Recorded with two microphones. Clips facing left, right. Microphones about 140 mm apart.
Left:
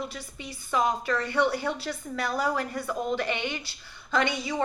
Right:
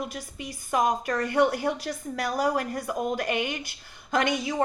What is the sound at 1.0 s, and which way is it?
A woman's voice, 45° right (ahead or behind).